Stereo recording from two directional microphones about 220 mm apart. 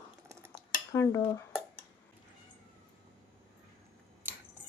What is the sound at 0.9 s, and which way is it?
Dishes, 15° left (ahead or behind).